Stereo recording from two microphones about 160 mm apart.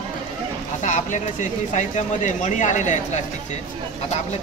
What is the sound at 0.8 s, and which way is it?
Speech, 50° left (ahead or behind).